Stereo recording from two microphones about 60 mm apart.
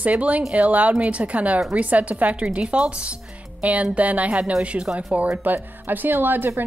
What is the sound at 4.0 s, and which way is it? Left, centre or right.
Speech, right.